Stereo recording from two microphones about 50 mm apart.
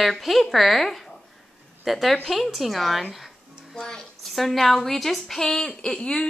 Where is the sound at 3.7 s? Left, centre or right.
Centre.